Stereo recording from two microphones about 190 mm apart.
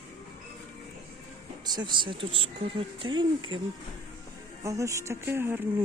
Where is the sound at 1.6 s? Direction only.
20° right (ahead or behind).